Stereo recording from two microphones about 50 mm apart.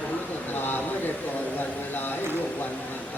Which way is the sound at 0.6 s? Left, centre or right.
Left.